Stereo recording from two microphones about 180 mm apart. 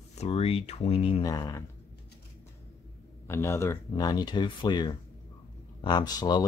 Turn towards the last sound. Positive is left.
turn(degrees=25)  # may be behind; listen again after turning